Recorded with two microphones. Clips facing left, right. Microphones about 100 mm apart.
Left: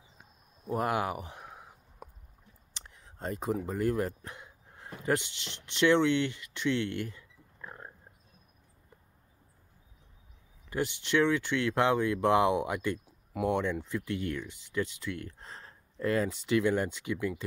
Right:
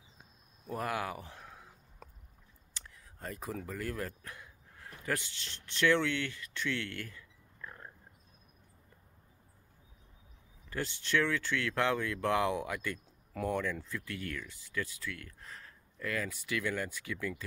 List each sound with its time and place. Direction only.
0.7 s a sound: 20° left (ahead or behind)
5.7 s speech: 20° left (ahead or behind)
10.7 s speech: 20° left (ahead or behind)